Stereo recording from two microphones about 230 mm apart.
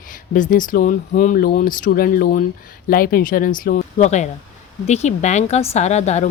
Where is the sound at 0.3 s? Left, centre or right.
Left.